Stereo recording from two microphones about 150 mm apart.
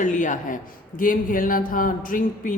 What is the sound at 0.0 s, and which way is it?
A woman's voice, 55° left (ahead or behind).